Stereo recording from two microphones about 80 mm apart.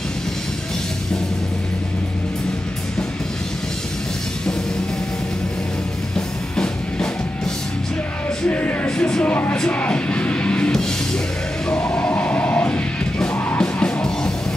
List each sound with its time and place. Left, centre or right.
6.1 s music: centre
8.5 s music: centre